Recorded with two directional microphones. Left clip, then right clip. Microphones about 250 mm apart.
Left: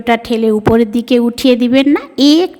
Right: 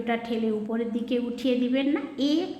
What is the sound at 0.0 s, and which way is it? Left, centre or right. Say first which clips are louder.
A woman's voice: left 15 dB; left.